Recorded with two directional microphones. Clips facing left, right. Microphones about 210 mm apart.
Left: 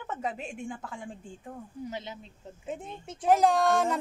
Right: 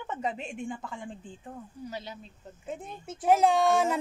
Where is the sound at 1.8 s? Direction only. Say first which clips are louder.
Left 1 dB; 20° left (ahead or behind).